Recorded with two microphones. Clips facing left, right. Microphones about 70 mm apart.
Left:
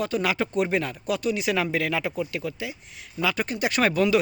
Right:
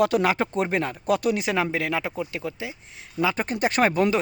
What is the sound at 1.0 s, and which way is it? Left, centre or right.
Speech, right.